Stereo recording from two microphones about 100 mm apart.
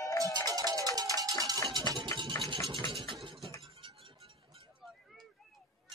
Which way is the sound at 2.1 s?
35° left (ahead or behind).